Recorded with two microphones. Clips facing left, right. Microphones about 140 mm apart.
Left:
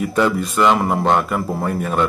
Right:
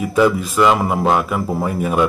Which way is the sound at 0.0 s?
Centre (ahead or behind).